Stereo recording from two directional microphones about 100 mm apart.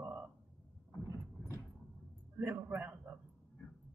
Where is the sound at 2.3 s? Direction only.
15° right (ahead or behind).